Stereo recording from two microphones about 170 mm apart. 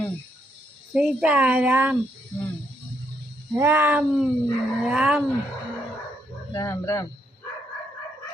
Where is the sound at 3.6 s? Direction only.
15° right (ahead or behind).